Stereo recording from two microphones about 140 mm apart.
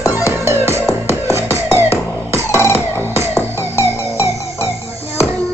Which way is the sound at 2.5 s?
20° left (ahead or behind).